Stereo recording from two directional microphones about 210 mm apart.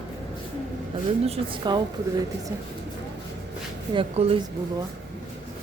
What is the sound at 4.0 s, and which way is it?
Speech, 30° right (ahead or behind).